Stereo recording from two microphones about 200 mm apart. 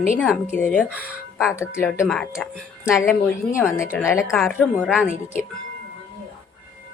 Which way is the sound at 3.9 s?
15° left (ahead or behind).